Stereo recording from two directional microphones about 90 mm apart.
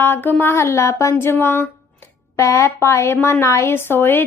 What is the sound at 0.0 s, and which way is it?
A woman's voice, 25° left (ahead or behind).